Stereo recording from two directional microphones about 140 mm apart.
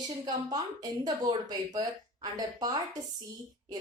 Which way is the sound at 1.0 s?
30° right (ahead or behind).